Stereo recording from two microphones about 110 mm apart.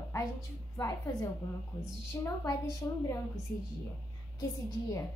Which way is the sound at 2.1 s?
25° left (ahead or behind).